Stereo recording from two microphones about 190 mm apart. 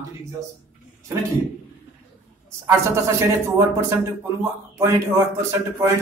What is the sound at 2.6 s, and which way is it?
Speech, 15° right (ahead or behind).